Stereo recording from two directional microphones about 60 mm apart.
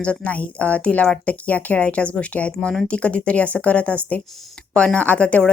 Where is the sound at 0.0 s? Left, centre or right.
Left.